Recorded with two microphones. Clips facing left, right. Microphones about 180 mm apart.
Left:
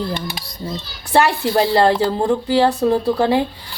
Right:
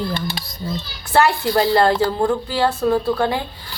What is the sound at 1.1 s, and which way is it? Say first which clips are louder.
Speech: left 1 dB; 20° left (ahead or behind).